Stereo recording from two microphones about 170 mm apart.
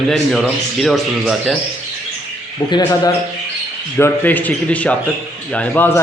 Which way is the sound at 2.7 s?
25° left (ahead or behind).